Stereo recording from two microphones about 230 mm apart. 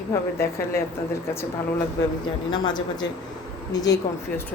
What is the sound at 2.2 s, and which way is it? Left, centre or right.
Speech, centre.